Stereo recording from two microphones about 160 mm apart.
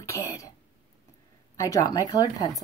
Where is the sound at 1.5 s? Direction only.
20° left (ahead or behind).